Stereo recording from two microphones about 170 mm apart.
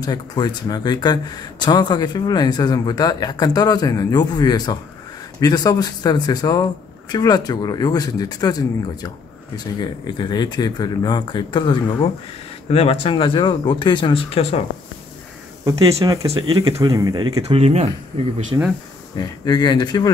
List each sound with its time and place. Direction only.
0.0 s speech: 25° left (ahead or behind)
15.6 s speech: 20° right (ahead or behind)
16.3 s speech: 35° right (ahead or behind)
18.5 s speech: 20° right (ahead or behind)
19.1 s speech: 25° left (ahead or behind)